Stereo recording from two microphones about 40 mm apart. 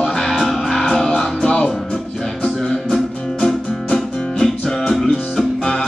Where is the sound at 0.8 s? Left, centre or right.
Centre.